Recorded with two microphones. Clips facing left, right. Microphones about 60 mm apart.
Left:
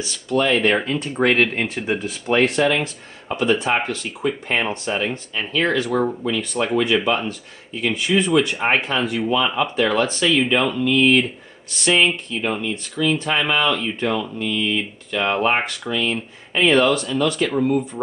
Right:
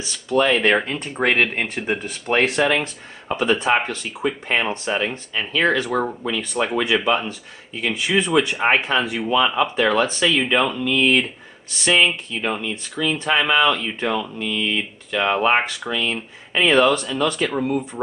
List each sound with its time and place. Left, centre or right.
0.4 s speech: centre